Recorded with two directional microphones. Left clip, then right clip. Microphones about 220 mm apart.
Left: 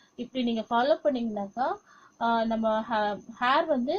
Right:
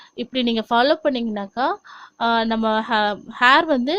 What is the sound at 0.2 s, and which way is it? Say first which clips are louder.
A woman's voice: right 8 dB; 40° right (ahead or behind).